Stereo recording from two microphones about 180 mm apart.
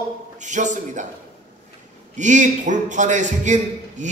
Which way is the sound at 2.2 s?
40° right (ahead or behind).